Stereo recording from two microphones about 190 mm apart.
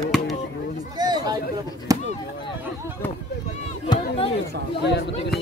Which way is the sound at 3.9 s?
30° left (ahead or behind).